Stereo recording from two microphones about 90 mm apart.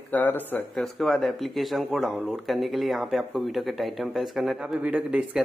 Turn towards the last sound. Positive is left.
turn(degrees=-10)  # may be behind; listen again after turning